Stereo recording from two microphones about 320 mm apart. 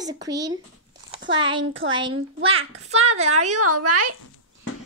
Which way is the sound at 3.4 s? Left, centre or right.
Right.